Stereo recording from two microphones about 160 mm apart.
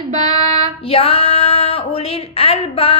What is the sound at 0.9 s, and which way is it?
Speech, 35° left (ahead or behind).